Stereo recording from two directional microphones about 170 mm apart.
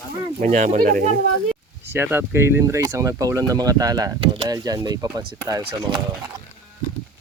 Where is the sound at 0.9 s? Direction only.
55° right (ahead or behind).